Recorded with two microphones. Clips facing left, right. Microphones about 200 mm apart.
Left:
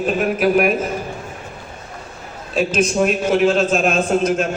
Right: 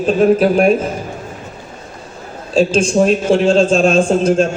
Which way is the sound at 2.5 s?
30° right (ahead or behind).